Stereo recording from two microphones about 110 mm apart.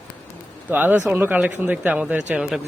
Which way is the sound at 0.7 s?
15° right (ahead or behind).